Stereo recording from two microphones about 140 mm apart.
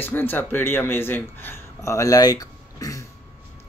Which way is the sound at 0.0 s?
15° left (ahead or behind).